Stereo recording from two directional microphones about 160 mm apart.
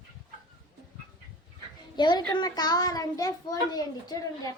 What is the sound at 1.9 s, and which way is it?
A child's voice, 30° left (ahead or behind).